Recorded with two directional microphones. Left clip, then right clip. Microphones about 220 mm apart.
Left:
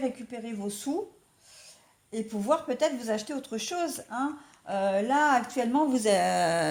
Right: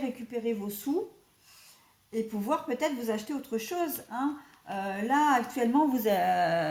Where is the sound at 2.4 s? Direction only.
35° left (ahead or behind).